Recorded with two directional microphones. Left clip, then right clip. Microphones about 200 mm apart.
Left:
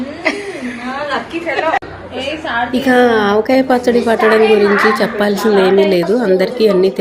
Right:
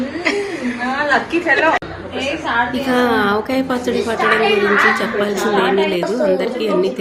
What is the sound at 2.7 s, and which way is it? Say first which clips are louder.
A woman's voice: left 5 dB; 20° left (ahead or behind).